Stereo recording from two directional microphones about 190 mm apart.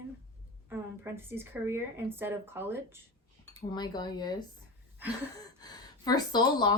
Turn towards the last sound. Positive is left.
turn(degrees=20)  # may be behind; listen again after turning